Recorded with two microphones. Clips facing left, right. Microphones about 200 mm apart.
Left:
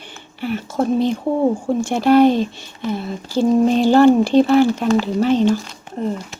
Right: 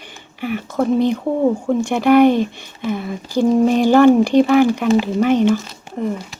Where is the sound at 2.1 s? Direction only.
60° right (ahead or behind).